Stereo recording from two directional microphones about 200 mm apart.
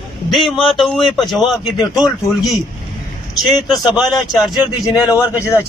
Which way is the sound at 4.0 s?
Centre (ahead or behind).